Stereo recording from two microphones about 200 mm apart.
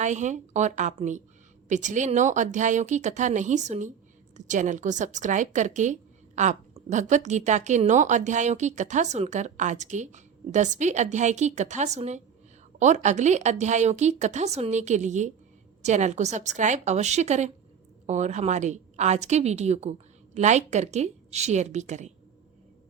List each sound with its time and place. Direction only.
0.0 s a woman's voice: 35° right (ahead or behind)